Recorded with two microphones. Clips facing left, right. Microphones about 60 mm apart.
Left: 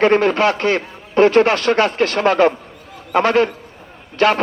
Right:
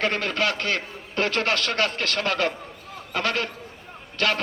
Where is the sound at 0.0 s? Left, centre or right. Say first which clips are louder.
Left 11 dB; left.